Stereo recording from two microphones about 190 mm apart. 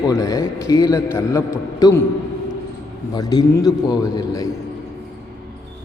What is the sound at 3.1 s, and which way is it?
A man's voice, 20° left (ahead or behind).